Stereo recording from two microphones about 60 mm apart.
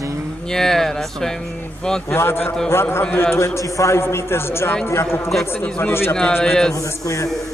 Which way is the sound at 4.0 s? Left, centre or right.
Left.